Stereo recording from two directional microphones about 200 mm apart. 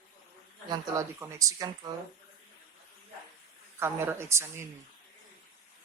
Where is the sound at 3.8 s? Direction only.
10° right (ahead or behind).